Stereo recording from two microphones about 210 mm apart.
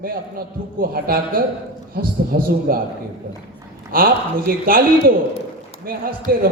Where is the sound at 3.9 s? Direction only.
45° right (ahead or behind).